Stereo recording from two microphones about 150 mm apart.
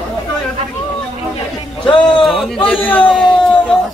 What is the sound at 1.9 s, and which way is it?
Speech, 35° left (ahead or behind).